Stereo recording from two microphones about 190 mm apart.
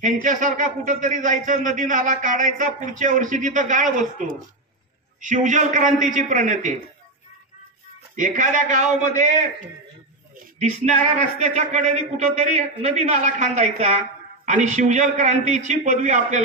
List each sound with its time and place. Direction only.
0.0 s speech: 40° right (ahead or behind)
8.2 s speech: 40° right (ahead or behind)
10.6 s speech: 35° right (ahead or behind)